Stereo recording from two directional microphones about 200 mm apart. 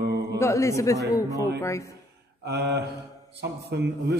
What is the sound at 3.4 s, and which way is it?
Speech, 55° right (ahead or behind).